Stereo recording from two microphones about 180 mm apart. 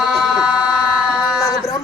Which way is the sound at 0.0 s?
Centre (ahead or behind).